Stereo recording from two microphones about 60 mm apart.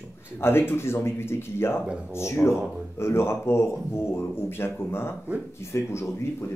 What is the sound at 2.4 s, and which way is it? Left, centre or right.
Speech, left.